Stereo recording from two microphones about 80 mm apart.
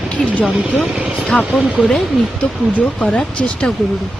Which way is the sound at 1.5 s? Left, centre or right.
Centre.